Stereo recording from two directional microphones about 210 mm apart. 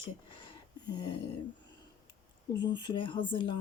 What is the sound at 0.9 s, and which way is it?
Speech, 20° left (ahead or behind).